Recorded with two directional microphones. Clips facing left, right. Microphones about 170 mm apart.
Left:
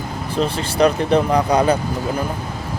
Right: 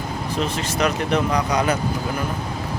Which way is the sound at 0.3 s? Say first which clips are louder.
Left 6 dB; 30° left (ahead or behind).